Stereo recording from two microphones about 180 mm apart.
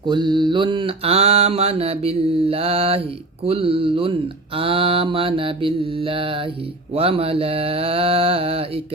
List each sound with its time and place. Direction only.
0.1 s mantra: 25° right (ahead or behind)